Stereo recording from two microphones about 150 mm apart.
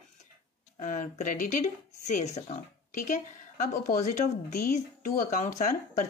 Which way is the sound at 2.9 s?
60° left (ahead or behind).